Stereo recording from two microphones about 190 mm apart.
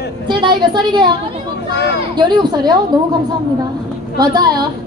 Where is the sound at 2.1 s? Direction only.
25° right (ahead or behind).